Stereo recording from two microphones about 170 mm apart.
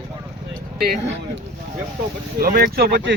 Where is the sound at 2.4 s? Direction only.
60° right (ahead or behind).